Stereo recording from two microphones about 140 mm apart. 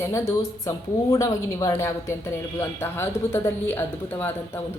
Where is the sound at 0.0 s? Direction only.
20° left (ahead or behind).